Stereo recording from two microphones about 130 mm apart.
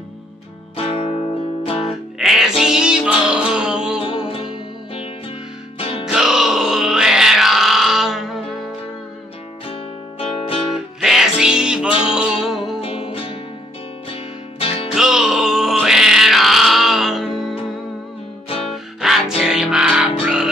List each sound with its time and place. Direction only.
0.7 s music: 50° left (ahead or behind)
2.1 s music: 5° right (ahead or behind)
4.0 s music: 45° left (ahead or behind)
6.0 s music: 5° right (ahead or behind)
9.7 s music: 45° left (ahead or behind)
10.7 s music: 5° right (ahead or behind)
12.8 s music: 45° left (ahead or behind)
14.6 s music: 50° left (ahead or behind)
15.0 s music: 5° right (ahead or behind)
18.7 s music: 5° right (ahead or behind)